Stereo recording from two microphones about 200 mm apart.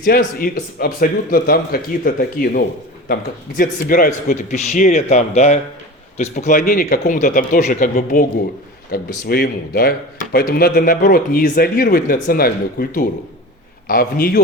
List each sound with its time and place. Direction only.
0.0 s a man's voice: 45° left (ahead or behind)